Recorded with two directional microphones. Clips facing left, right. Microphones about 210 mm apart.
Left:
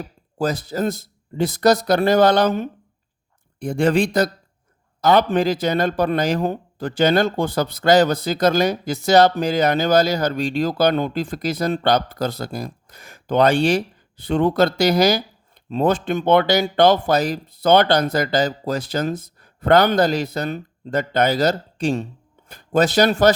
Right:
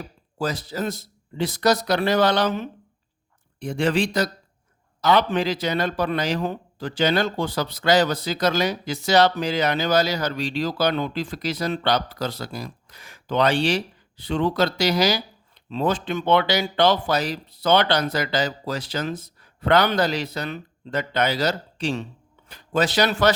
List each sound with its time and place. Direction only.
0.3 s speech: 50° left (ahead or behind)